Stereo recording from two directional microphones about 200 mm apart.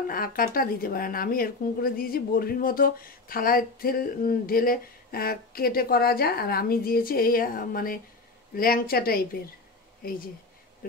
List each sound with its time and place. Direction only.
0.1 s speech: 45° left (ahead or behind)
10.8 s speech: 45° left (ahead or behind)